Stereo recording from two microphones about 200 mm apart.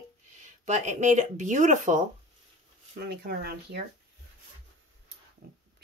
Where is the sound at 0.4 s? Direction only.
35° right (ahead or behind).